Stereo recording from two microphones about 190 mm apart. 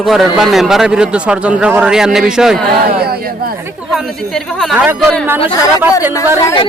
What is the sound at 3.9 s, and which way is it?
A man's voice, centre (ahead or behind).